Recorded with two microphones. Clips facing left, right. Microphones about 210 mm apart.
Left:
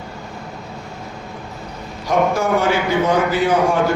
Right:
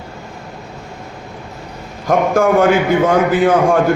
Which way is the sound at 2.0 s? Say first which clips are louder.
Right 4 dB; 55° right (ahead or behind).